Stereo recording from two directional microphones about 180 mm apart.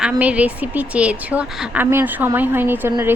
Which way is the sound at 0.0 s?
10° right (ahead or behind).